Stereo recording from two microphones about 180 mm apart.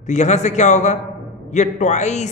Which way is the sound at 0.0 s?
40° left (ahead or behind).